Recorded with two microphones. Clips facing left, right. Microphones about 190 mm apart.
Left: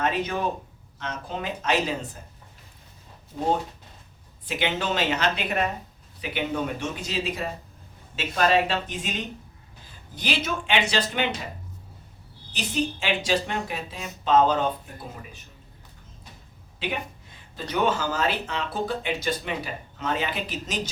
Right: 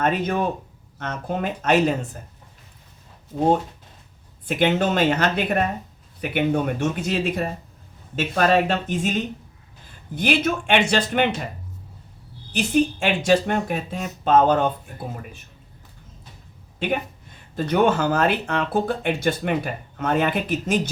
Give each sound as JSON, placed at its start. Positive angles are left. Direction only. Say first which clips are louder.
{"t": 0.0, "sound": "speech", "louder": "right 4 dB", "side_deg": -50}
{"t": 4.4, "sound": "speech", "louder": "right 7 dB", "side_deg": -50}
{"t": 12.5, "sound": "speech", "louder": "right 8 dB", "side_deg": -50}
{"t": 17.6, "sound": "speech", "louder": "right 6 dB", "side_deg": -55}